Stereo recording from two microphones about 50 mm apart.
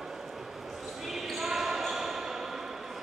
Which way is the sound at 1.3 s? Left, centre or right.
Centre.